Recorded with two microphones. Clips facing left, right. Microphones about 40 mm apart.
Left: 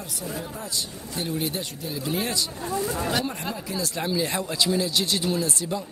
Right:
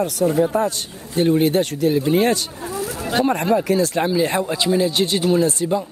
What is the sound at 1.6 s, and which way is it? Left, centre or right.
Speech, right.